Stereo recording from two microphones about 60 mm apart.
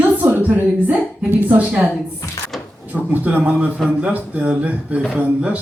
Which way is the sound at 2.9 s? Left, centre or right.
Right.